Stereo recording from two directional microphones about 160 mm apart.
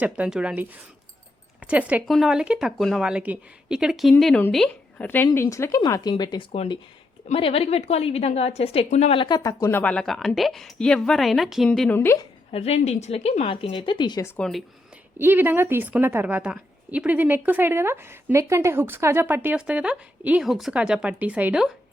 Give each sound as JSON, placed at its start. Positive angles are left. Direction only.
{"t": 0.0, "sound": "a woman's voice", "side_deg": -5}
{"t": 6.5, "sound": "a woman's voice", "side_deg": 40}
{"t": 9.8, "sound": "speech", "side_deg": 5}
{"t": 12.5, "sound": "a woman's voice", "side_deg": 40}
{"t": 14.3, "sound": "speech", "side_deg": 5}
{"t": 15.2, "sound": "a woman's voice", "side_deg": -15}